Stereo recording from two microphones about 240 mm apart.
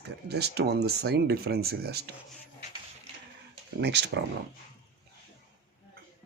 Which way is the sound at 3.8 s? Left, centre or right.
Right.